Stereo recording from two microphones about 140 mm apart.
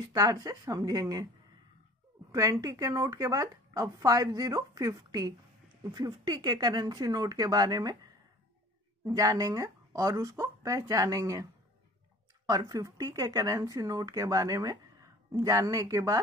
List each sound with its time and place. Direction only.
0.1 s speech: 25° right (ahead or behind)
2.3 s speech: 25° right (ahead or behind)
12.4 s speech: 25° right (ahead or behind)